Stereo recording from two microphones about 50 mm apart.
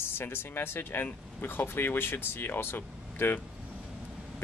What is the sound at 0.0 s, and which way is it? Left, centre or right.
Speech, left.